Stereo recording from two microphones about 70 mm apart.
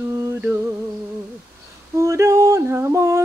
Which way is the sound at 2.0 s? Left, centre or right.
Right.